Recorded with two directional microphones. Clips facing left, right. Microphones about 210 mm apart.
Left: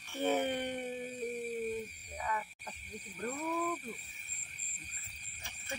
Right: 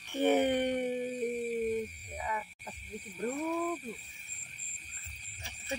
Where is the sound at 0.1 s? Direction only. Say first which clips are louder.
Right 5 dB; 20° right (ahead or behind).